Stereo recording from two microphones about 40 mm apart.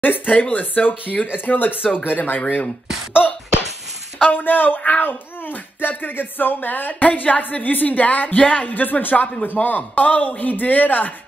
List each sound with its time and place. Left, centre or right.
0.0 s speech: left
3.1 s a sound: left
4.3 s speech: left